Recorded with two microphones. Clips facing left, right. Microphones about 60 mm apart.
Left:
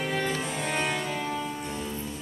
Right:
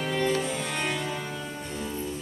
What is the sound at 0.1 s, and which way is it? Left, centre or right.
Music, centre.